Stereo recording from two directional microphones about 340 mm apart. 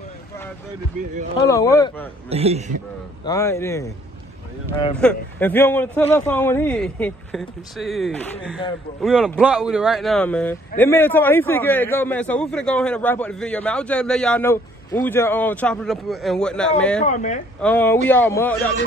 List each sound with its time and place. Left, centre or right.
1.5 s speech: centre
2.2 s a man's voice: centre
3.3 s speech: centre
5.0 s a man's voice: centre
17.0 s speech: left
17.6 s a man's voice: centre